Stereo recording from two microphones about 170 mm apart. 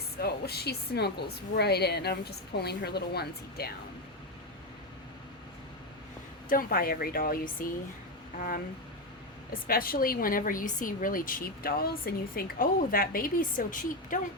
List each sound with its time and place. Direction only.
0.2 s a woman's voice: 70° left (ahead or behind)
6.5 s a woman's voice: 60° left (ahead or behind)